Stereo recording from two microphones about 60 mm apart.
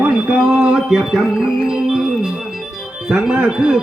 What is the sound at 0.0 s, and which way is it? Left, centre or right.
Speech, centre.